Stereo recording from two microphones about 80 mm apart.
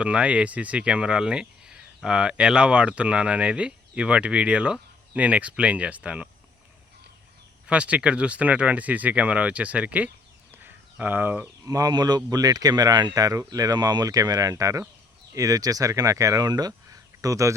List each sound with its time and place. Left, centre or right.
0.0 s speech: centre
7.7 s speech: centre
10.5 s a sound: right
11.6 s speech: right